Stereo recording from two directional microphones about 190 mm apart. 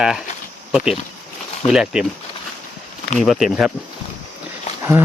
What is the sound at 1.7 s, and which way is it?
Speech, 5° right (ahead or behind).